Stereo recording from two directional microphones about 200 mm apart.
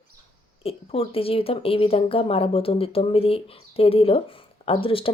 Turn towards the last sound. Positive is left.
turn(degrees=25)  # may be behind; listen again after turning